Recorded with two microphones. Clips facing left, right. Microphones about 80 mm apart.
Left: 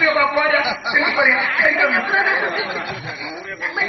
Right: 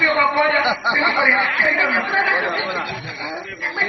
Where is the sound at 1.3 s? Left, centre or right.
Centre.